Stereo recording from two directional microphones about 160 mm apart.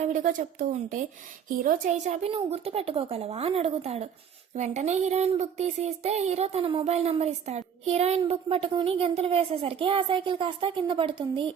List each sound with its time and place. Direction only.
0.0 s a woman's voice: 55° right (ahead or behind); by 11.5 s 30° right (ahead or behind)